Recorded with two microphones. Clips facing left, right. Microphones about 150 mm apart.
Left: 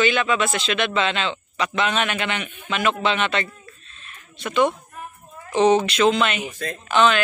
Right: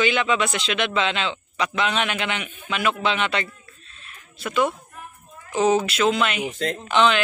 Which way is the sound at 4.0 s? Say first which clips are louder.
Even; 5° right (ahead or behind).